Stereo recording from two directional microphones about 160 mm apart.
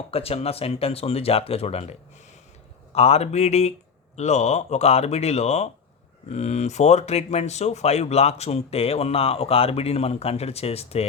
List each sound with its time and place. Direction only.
0.1 s speech: 40° left (ahead or behind)